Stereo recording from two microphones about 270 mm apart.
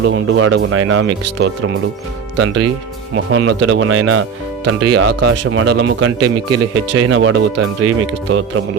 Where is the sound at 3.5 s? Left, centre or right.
Right.